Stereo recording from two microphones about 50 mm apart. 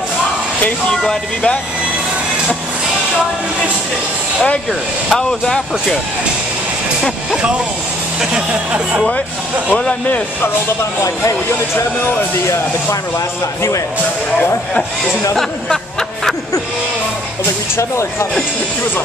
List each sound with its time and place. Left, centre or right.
1.0 s speech: centre
5.1 s speech: centre
8.3 s speech: centre
9.7 s speech: left
13.6 s speech: left
15.3 s a sound: centre
17.7 s speech: left